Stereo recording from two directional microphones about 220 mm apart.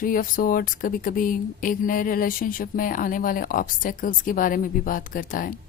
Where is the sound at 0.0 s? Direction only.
40° left (ahead or behind).